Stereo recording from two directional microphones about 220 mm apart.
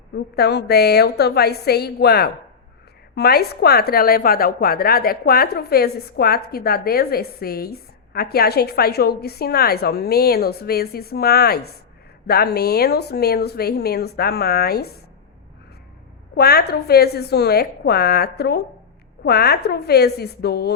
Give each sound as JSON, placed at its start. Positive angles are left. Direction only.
{"t": 0.3, "sound": "a woman's voice", "side_deg": 45}
{"t": 16.3, "sound": "a woman's voice", "side_deg": 45}